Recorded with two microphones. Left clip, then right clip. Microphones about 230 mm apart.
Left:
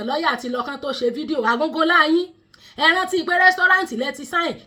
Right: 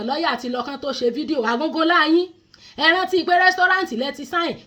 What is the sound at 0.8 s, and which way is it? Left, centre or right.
Speech, left.